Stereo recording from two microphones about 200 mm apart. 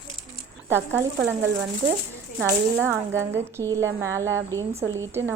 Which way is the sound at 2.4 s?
10° right (ahead or behind).